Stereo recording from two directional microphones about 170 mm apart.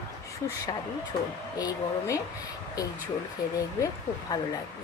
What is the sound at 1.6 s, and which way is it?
Speech, 20° left (ahead or behind).